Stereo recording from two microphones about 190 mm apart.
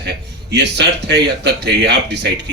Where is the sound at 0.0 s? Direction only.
60° right (ahead or behind).